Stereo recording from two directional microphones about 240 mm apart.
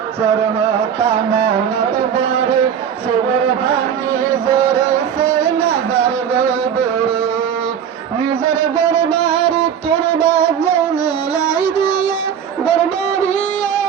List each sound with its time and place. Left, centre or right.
0.9 s music: right
5.5 s a sound: centre
8.5 s music: centre; by 13.3 s left